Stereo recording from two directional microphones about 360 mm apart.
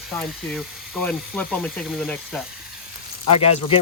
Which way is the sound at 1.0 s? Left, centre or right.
Centre.